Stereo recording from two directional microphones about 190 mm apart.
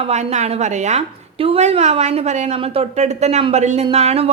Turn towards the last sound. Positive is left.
turn(degrees=-35)  # may be behind; listen again after turning